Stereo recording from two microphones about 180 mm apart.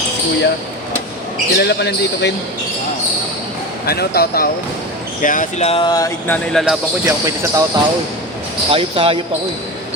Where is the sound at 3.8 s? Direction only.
60° left (ahead or behind).